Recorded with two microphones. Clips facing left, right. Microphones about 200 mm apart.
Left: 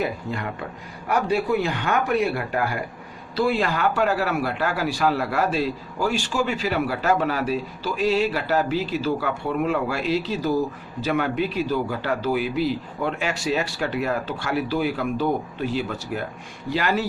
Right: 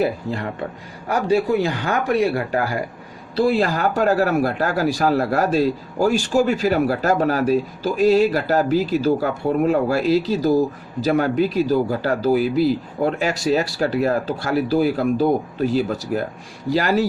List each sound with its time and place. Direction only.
0.0 s speech: 35° right (ahead or behind)